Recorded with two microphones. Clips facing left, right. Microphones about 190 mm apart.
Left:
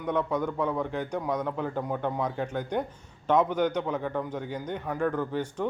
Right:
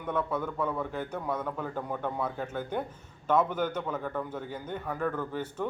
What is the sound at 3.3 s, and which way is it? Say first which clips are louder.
A man's voice: left 3 dB; 15° left (ahead or behind).